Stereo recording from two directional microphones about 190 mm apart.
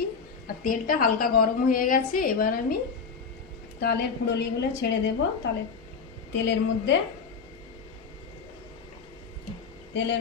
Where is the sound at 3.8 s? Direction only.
60° left (ahead or behind).